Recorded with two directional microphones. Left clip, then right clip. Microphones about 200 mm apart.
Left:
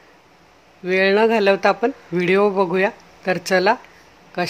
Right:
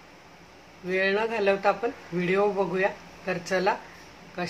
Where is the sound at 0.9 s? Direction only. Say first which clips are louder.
Left 10 dB; 50° left (ahead or behind).